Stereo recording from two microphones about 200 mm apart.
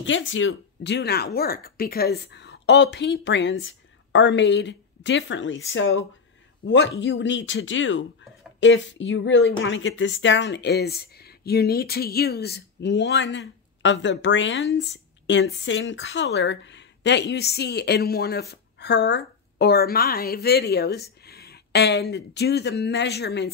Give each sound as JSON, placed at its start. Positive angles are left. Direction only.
{"t": 0.0, "sound": "speech", "side_deg": 70}
{"t": 6.6, "sound": "speech", "side_deg": 65}